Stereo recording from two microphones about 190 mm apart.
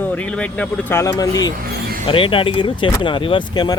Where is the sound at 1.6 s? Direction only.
55° right (ahead or behind).